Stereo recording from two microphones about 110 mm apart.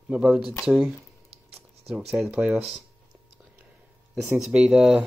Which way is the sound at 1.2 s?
60° right (ahead or behind).